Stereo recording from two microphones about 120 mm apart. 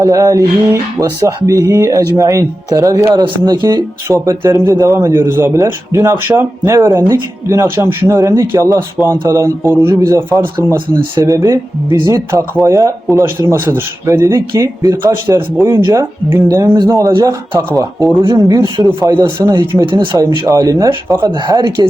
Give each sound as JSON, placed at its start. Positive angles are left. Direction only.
{"t": 0.0, "sound": "speech", "side_deg": -30}
{"t": 16.7, "sound": "speech", "side_deg": -35}
{"t": 18.2, "sound": "speech", "side_deg": -45}
{"t": 20.5, "sound": "speech", "side_deg": -30}